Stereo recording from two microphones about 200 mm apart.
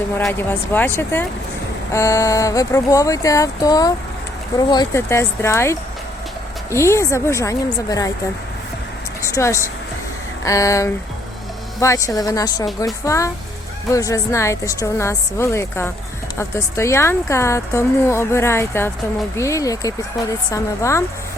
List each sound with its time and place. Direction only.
0.2 s speech: 5° left (ahead or behind)
9.2 s speech: 15° left (ahead or behind)